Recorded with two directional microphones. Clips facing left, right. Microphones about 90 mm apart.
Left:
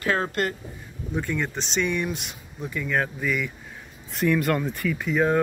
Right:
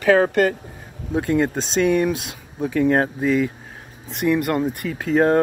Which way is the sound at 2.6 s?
90° right.